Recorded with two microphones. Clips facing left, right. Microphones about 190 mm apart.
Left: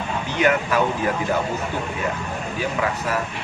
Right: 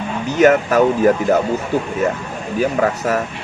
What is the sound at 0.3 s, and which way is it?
Speech, 45° right (ahead or behind).